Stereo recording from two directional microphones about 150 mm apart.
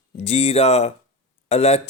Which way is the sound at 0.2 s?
45° left (ahead or behind).